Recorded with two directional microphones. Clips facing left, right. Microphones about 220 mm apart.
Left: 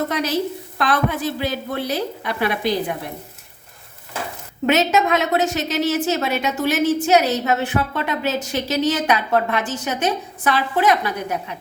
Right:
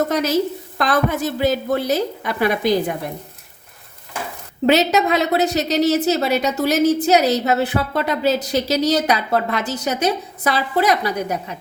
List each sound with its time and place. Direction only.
0.1 s a woman's voice: 40° right (ahead or behind)
4.6 s a woman's voice: 35° right (ahead or behind)